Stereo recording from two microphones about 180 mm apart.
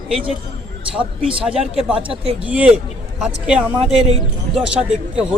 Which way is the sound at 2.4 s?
5° right (ahead or behind).